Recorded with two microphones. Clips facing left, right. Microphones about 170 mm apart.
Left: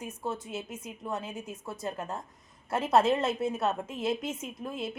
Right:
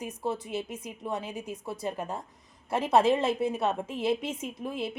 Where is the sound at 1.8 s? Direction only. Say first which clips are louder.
Right 1 dB; 10° right (ahead or behind).